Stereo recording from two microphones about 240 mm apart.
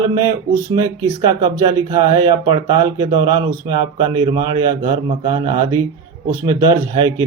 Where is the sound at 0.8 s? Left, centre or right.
Centre.